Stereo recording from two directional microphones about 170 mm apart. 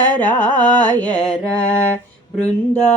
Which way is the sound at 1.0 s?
5° left (ahead or behind).